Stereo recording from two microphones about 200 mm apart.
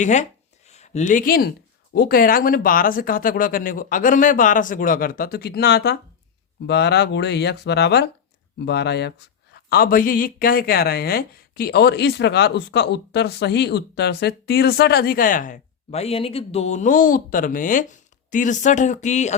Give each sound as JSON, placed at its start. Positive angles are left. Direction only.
{"t": 0.0, "sound": "speech", "side_deg": 35}